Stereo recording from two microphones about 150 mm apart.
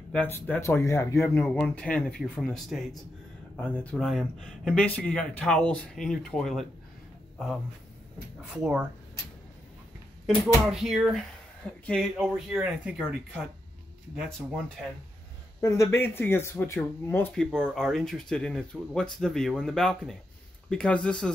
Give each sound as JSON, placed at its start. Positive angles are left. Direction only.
{"t": 0.1, "sound": "speech", "side_deg": 10}
{"t": 10.2, "sound": "speech", "side_deg": -5}
{"t": 15.6, "sound": "speech", "side_deg": 20}
{"t": 17.3, "sound": "speech", "side_deg": 5}